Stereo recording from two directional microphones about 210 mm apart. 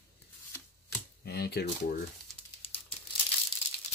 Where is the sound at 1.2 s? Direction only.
50° left (ahead or behind).